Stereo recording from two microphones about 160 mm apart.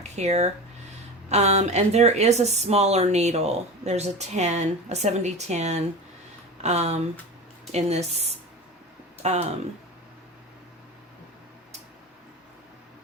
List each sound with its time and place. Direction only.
0.2 s speech: 45° right (ahead or behind)